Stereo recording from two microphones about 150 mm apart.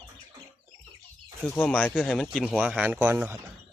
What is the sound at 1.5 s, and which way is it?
Speech, 5° left (ahead or behind).